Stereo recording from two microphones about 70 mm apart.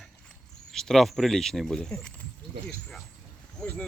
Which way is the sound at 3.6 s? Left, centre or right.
Centre.